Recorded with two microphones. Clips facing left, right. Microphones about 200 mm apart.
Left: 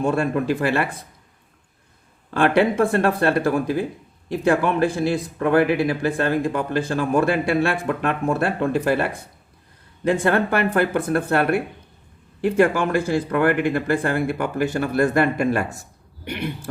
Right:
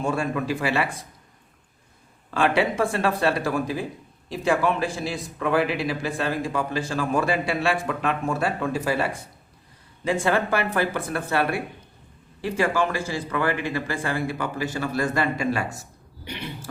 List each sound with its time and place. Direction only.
0.0 s a man's voice: 55° left (ahead or behind)
2.3 s a man's voice: 55° left (ahead or behind)